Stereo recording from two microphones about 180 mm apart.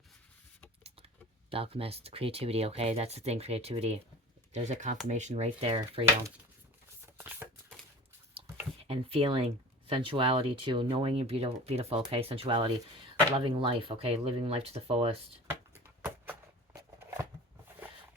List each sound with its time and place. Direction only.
1.5 s speech: 30° right (ahead or behind)
7.0 s shuffling cards: 10° right (ahead or behind)
8.8 s speech: 30° right (ahead or behind)
15.7 s a sound: 10° right (ahead or behind)